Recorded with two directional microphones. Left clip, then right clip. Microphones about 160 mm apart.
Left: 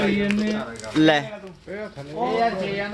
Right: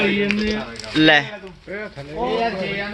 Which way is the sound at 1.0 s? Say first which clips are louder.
Right 4 dB; 10° left (ahead or behind).